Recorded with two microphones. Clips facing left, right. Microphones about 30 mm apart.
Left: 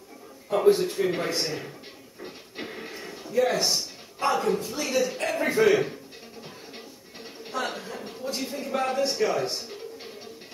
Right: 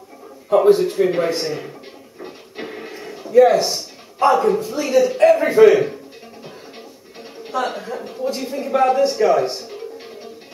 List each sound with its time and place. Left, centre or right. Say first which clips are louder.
0.7 s television: right 8 dB; centre
3.3 s a man's voice: right 11 dB; right
7.4 s a woman's voice: right 8 dB; centre